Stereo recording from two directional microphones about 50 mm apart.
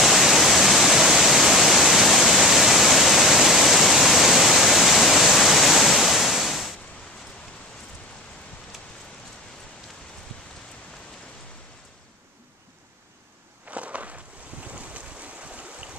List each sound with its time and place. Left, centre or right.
0.0 s waterfall: centre
13.7 s walk: right
14.7 s boat: right